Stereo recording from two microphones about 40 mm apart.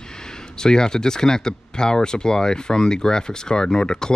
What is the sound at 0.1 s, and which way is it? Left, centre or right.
Speech, centre.